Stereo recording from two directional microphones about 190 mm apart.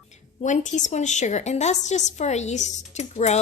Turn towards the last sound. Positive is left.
turn(degrees=35)  # may be behind; listen again after turning